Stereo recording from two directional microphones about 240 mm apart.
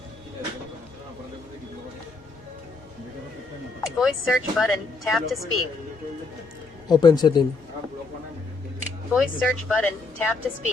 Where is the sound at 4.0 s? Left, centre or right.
Centre.